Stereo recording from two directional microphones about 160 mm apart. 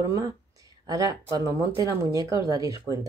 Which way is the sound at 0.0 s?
20° right (ahead or behind).